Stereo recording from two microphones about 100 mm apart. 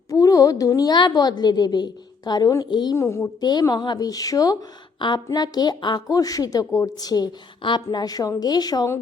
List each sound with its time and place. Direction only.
0.1 s a woman's voice: 35° left (ahead or behind)
2.6 s a woman's voice: 50° left (ahead or behind)
2.9 s a woman's voice: 30° left (ahead or behind)
3.4 s a woman's voice: 45° left (ahead or behind)
4.9 s a woman's voice: 50° left (ahead or behind)